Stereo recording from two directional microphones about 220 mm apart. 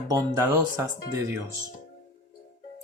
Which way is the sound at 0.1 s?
15° right (ahead or behind).